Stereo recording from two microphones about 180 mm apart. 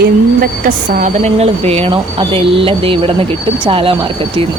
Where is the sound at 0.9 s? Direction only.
45° right (ahead or behind).